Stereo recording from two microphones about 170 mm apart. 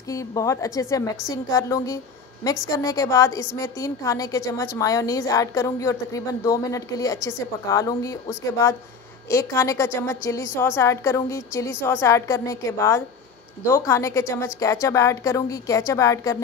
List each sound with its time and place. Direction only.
0.1 s a woman's voice: 20° left (ahead or behind)